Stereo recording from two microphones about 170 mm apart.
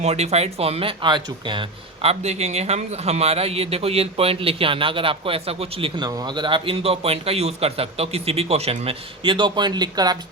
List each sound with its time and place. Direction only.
0.0 s speech: 40° right (ahead or behind); by 10.2 s 25° right (ahead or behind)